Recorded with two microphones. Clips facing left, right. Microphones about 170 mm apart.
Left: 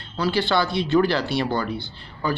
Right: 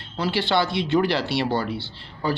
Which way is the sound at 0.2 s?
25° right (ahead or behind).